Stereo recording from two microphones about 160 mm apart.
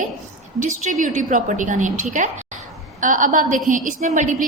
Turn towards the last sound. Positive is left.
turn(degrees=-50)  # may be behind; listen again after turning